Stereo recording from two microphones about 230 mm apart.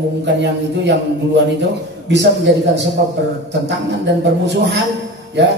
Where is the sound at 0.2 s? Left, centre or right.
Right.